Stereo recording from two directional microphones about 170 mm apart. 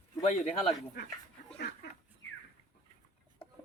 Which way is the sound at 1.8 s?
85° left.